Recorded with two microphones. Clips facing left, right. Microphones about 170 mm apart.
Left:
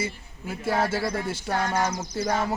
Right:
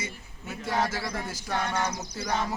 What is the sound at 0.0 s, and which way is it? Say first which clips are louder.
A man's voice: left 7 dB; 30° left (ahead or behind).